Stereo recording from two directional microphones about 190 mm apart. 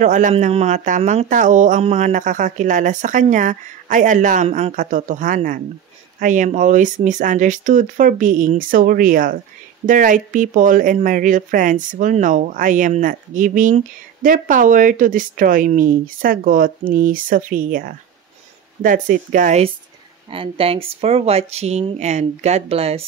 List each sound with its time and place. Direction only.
0.0 s speech: 40° right (ahead or behind)
20.2 s speech: 30° right (ahead or behind)